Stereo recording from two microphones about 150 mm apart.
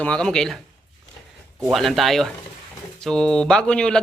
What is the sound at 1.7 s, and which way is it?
A man's voice, centre (ahead or behind).